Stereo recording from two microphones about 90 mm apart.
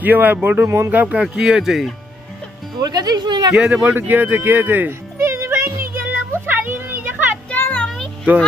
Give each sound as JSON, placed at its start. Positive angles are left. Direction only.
{"t": 0.0, "sound": "speech", "side_deg": -20}
{"t": 1.0, "sound": "speech", "side_deg": -10}
{"t": 2.8, "sound": "speech", "side_deg": -45}
{"t": 3.5, "sound": "speech", "side_deg": -5}
{"t": 3.8, "sound": "music", "side_deg": -20}
{"t": 7.5, "sound": "music", "side_deg": 15}